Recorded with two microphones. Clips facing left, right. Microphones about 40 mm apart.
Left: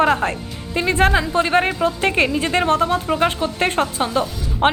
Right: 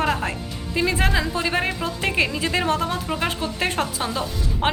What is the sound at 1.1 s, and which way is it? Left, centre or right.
Speech, left.